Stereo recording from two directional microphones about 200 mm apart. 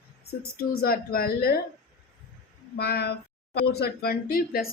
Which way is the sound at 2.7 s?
55° left (ahead or behind).